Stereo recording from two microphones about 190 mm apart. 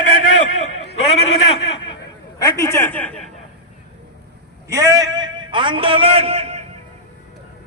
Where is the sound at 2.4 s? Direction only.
15° left (ahead or behind).